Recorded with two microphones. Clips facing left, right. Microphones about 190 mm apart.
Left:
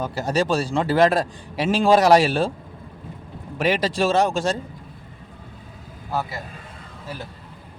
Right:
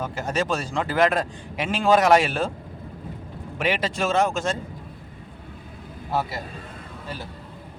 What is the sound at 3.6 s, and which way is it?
Speech, 40° left (ahead or behind).